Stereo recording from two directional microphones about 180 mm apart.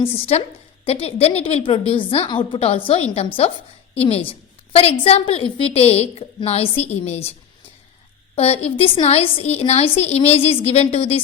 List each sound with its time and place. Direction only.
0.0 s a woman's voice: 35° left (ahead or behind)
8.4 s a woman's voice: 35° left (ahead or behind)